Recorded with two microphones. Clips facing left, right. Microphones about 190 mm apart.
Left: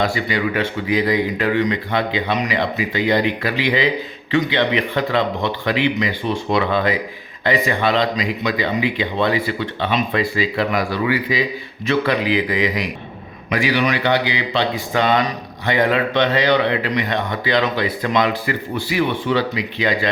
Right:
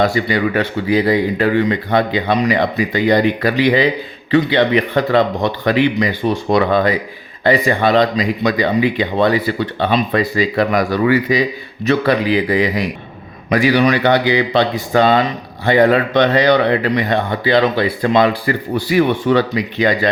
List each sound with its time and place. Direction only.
0.0 s speech: 40° right (ahead or behind)
16.9 s speech: 35° right (ahead or behind)